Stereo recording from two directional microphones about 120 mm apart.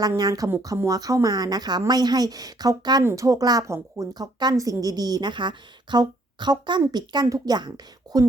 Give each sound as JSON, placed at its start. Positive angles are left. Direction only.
{"t": 0.2, "sound": "a woman's voice", "side_deg": -30}
{"t": 3.0, "sound": "a woman's voice", "side_deg": -25}